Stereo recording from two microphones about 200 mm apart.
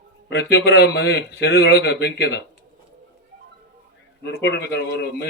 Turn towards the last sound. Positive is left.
turn(degrees=55)  # may be behind; listen again after turning